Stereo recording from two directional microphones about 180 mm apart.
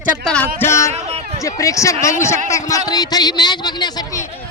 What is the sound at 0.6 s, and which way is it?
Speech, 15° left (ahead or behind).